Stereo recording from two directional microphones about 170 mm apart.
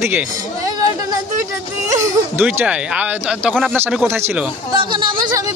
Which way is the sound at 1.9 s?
20° right (ahead or behind).